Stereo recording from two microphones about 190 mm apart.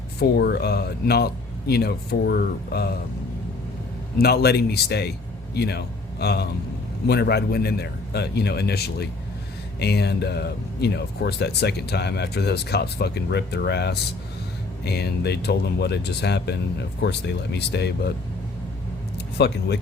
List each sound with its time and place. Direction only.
0.2 s speech: 60° left (ahead or behind)
4.2 s speech: 55° left (ahead or behind)
19.4 s speech: 60° left (ahead or behind)